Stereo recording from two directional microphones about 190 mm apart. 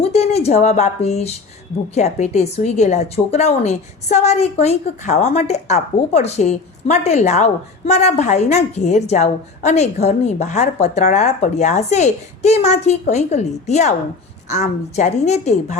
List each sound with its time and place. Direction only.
0.0 s a woman's voice: 35° left (ahead or behind)